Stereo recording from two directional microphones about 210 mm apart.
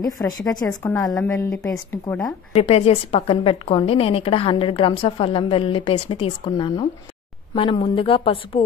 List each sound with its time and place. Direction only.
0.5 s a woman's voice: 15° left (ahead or behind)
2.5 s a woman's voice: 30° left (ahead or behind)